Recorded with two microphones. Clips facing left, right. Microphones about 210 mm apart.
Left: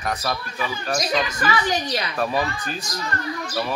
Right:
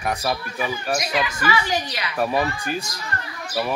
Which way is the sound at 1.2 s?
40° left (ahead or behind).